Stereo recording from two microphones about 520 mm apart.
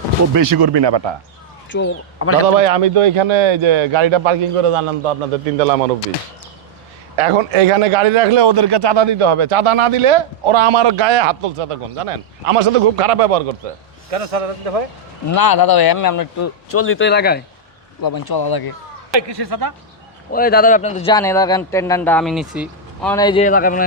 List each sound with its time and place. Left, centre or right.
0.3 s speech: right
1.7 s a man's voice: left
2.6 s a man's voice: right
7.2 s a man's voice: right
15.3 s a man's voice: left; by 17.4 s centre
18.0 s speech: left
19.1 s speech: right
20.3 s speech: centre